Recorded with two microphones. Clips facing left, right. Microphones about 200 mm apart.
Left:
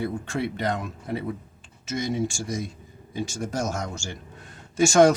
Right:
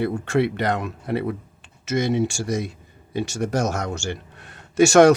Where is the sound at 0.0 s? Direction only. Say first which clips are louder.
Right 7 dB; 70° right (ahead or behind).